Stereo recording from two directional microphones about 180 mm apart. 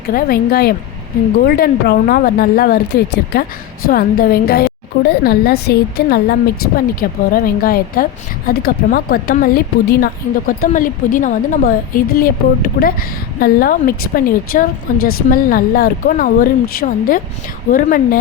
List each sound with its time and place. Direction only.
0.1 s a woman's voice: 55° left (ahead or behind)